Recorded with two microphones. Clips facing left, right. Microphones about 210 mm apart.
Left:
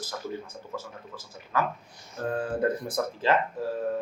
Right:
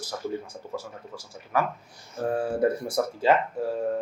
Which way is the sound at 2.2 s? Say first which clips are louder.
Right 3 dB; 10° right (ahead or behind).